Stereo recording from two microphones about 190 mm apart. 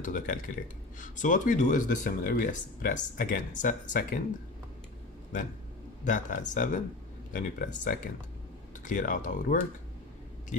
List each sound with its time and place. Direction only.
0.0 s speech: 45° left (ahead or behind)
6.0 s speech: 45° left (ahead or behind)